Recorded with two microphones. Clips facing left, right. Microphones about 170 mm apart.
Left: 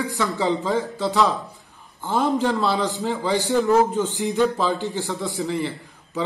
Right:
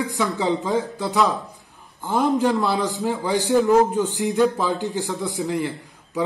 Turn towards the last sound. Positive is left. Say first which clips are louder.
# right 2 dB
turn(degrees=-15)  # may be behind; listen again after turning